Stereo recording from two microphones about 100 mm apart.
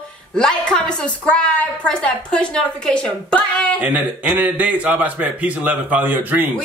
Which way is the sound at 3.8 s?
15° right (ahead or behind).